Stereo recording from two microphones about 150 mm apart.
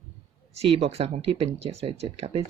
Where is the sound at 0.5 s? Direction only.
45° right (ahead or behind).